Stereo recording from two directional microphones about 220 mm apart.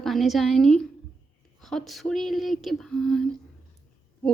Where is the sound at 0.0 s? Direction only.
Centre (ahead or behind).